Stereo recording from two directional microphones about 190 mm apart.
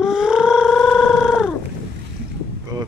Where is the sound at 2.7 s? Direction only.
20° right (ahead or behind).